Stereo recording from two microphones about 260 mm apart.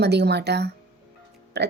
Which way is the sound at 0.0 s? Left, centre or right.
Right.